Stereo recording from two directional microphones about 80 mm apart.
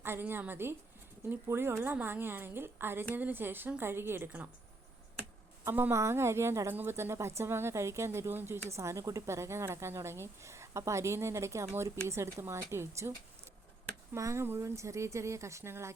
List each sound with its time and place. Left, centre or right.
0.0 s speech: right
5.6 s a woman's voice: right
14.2 s a woman's voice: right